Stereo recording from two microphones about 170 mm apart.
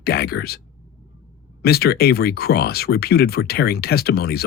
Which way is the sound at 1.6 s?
65° left (ahead or behind).